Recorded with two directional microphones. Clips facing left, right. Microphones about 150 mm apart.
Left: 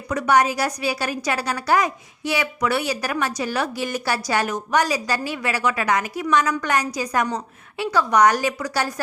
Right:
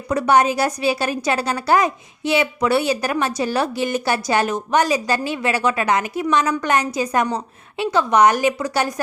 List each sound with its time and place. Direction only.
0.1 s a woman's voice: 30° right (ahead or behind)